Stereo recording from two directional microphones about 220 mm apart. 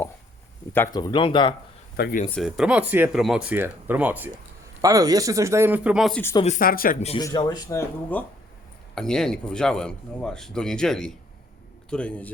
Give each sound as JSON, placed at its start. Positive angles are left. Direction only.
{"t": 0.7, "sound": "speech", "side_deg": 15}
{"t": 2.0, "sound": "speech", "side_deg": 45}
{"t": 2.3, "sound": "speech", "side_deg": 0}
{"t": 6.3, "sound": "speech", "side_deg": 30}
{"t": 7.2, "sound": "speech", "side_deg": 15}
{"t": 9.0, "sound": "speech", "side_deg": 0}